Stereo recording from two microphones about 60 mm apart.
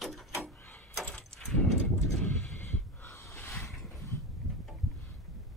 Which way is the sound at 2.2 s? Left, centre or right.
Left.